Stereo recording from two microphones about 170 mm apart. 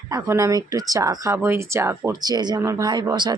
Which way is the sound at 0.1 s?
20° right (ahead or behind).